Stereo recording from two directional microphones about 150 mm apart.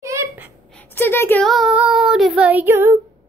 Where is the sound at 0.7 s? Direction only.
15° left (ahead or behind).